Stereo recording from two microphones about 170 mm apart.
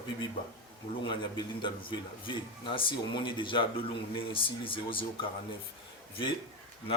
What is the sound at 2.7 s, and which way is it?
Speech, 30° left (ahead or behind).